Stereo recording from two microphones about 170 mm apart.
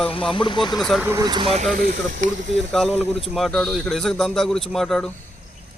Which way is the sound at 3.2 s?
Centre (ahead or behind).